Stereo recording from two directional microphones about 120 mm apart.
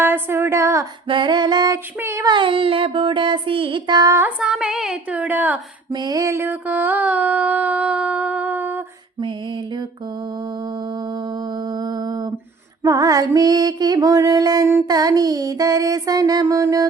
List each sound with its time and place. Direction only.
0.0 s a woman's voice: 20° right (ahead or behind)
1.0 s music: 45° right (ahead or behind)
2.0 s a woman's voice: 20° right (ahead or behind)
2.2 s child singing: 45° right (ahead or behind)
4.4 s a sound: 5° right (ahead or behind)
5.9 s a sound: 35° right (ahead or behind); by 8.8 s 15° right (ahead or behind)
11.8 s mantra: 35° right (ahead or behind)
12.8 s music: 30° right (ahead or behind)